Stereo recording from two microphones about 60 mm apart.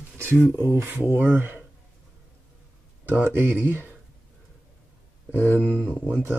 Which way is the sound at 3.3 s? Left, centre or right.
Right.